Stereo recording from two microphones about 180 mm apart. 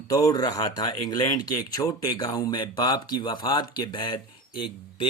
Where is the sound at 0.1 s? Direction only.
20° left (ahead or behind).